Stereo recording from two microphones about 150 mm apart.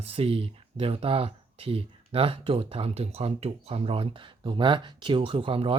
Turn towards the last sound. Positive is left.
turn(degrees=-35)  # may be behind; listen again after turning